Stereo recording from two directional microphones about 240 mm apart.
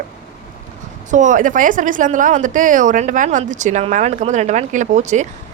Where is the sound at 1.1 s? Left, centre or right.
Right.